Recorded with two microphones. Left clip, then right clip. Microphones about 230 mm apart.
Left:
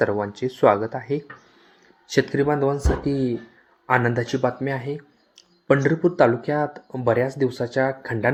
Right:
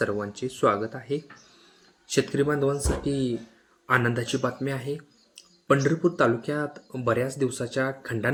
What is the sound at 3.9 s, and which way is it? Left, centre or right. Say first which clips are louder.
Speech: left 4 dB; centre.